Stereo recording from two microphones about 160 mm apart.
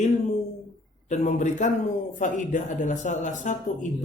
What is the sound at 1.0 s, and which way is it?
A woman's voice, 45° left (ahead or behind).